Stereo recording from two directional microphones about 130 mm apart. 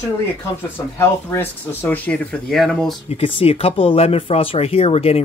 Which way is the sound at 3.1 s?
50° left (ahead or behind).